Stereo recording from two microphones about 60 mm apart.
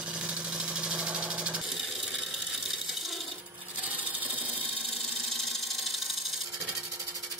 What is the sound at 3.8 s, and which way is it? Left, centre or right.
Wood, right.